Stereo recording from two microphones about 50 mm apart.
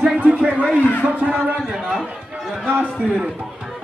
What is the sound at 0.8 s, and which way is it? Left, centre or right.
Speech, left.